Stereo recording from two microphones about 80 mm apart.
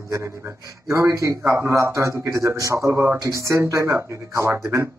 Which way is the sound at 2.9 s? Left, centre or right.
Right.